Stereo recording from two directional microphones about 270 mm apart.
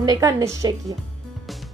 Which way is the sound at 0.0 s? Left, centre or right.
Centre.